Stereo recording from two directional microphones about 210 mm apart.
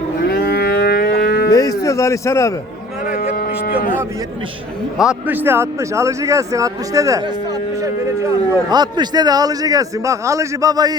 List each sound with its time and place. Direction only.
0.3 s livestock: 50° left (ahead or behind)
1.5 s a man's voice: 15° left (ahead or behind)
3.1 s a sound: 45° left (ahead or behind)
4.9 s a man's voice: 5° right (ahead or behind)